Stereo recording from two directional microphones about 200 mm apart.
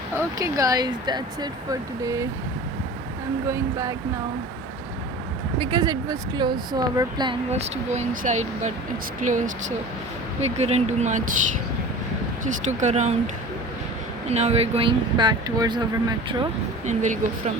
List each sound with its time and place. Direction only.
0.3 s speech: 15° right (ahead or behind)
3.4 s speech: 15° right (ahead or behind)
5.5 s speech: 20° right (ahead or behind)
7.5 s speech: 35° right (ahead or behind)
12.5 s speech: 35° right (ahead or behind); by 16.5 s 20° right (ahead or behind)
16.8 s speech: 35° right (ahead or behind)